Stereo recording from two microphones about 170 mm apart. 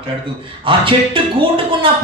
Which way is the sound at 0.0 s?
30° right (ahead or behind).